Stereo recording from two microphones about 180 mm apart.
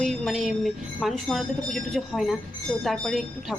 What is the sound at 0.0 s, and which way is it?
Speech, centre (ahead or behind).